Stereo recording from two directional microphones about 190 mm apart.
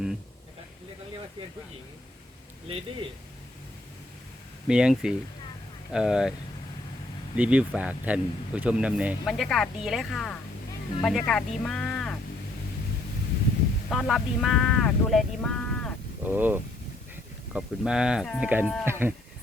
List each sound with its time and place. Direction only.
2.6 s a man's voice: 30° right (ahead or behind)
4.7 s speech: 5° right (ahead or behind)
7.3 s speech: 5° right (ahead or behind)
13.9 s speech: centre (ahead or behind)
16.2 s speech: 10° right (ahead or behind)